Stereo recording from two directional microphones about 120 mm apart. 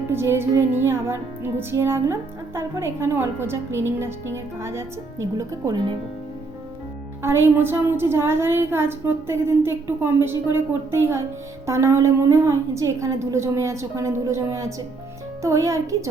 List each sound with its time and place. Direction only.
0.1 s a woman's voice: 20° right (ahead or behind)
7.2 s a woman's voice: 20° right (ahead or behind)